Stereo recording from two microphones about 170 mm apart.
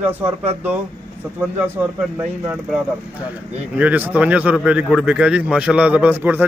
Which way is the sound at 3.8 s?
10° right (ahead or behind).